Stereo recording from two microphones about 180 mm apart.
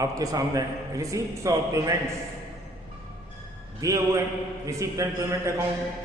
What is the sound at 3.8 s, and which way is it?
A man's voice, 20° right (ahead or behind).